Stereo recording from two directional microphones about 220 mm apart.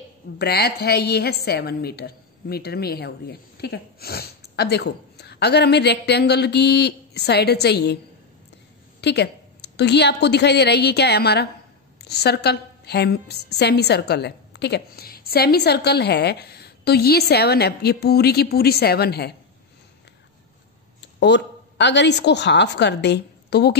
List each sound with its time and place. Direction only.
0.4 s a woman's voice: 45° left (ahead or behind)
9.0 s a woman's voice: 50° left (ahead or behind)
21.2 s a woman's voice: 50° left (ahead or behind)